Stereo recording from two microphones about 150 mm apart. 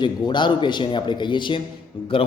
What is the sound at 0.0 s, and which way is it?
A man's voice, 30° left (ahead or behind).